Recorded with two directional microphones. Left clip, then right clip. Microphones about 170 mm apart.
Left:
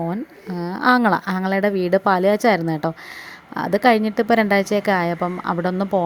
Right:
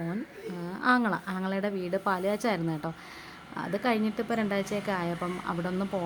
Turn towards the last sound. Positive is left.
turn(degrees=40)  # may be behind; listen again after turning